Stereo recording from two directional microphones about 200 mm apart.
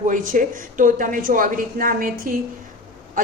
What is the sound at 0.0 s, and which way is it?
A woman's voice, 40° right (ahead or behind).